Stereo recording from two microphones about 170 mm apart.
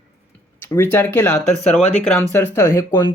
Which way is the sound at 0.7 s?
15° left (ahead or behind).